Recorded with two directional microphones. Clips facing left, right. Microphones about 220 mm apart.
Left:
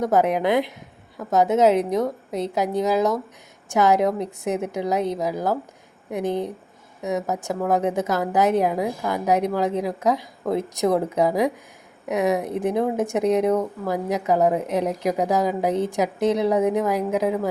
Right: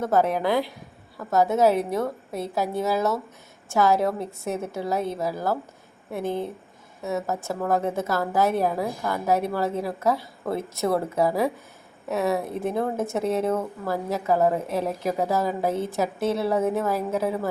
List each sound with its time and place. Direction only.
0.0 s a woman's voice: 15° left (ahead or behind)